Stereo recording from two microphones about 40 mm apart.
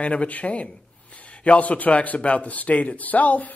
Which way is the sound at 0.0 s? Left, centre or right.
Left.